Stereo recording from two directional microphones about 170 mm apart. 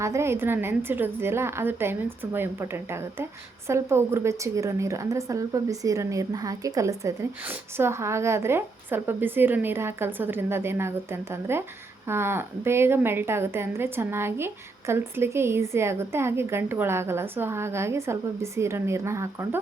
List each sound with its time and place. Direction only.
0.0 s a woman's voice: 15° right (ahead or behind)